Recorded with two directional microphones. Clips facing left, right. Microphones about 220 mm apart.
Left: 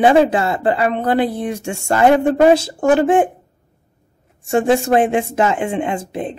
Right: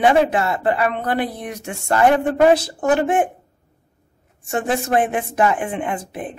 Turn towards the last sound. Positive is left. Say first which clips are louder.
# left 4 dB
turn(degrees=25)  # may be behind; listen again after turning